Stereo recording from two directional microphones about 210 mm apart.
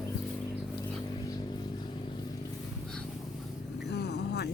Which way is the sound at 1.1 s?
20° left (ahead or behind).